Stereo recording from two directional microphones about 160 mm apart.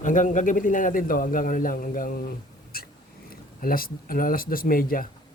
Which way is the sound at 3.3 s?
65° left (ahead or behind).